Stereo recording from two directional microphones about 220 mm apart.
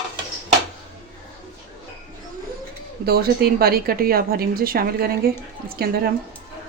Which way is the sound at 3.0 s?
45° right (ahead or behind).